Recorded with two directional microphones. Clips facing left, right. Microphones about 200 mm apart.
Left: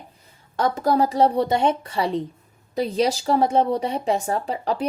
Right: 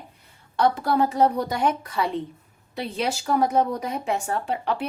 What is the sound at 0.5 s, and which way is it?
Speech, 45° left (ahead or behind).